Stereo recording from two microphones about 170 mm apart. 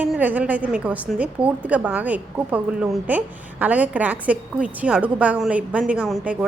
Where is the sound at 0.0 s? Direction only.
10° right (ahead or behind).